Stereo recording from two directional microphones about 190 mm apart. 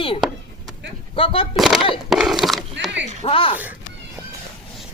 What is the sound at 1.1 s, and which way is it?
Speech, 30° left (ahead or behind).